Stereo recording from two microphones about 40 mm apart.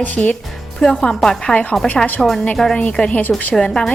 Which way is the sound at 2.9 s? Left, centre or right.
Left.